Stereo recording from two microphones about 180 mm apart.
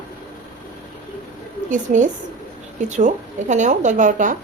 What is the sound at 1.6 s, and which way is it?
A woman's voice, 45° right (ahead or behind).